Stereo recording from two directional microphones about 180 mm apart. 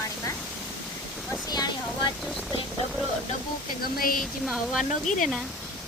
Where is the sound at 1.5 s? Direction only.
20° left (ahead or behind).